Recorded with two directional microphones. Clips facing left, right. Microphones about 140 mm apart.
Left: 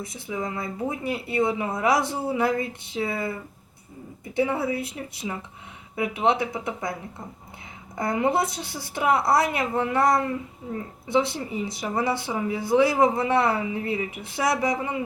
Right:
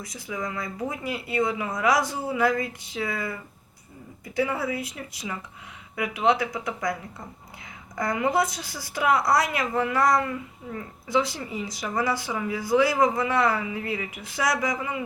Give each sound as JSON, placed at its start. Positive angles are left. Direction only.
{"t": 0.0, "sound": "speech", "side_deg": 25}
{"t": 4.4, "sound": "speech", "side_deg": 25}
{"t": 7.9, "sound": "speech", "side_deg": 25}